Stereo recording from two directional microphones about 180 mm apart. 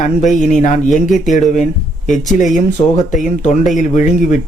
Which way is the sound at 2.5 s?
40° left (ahead or behind).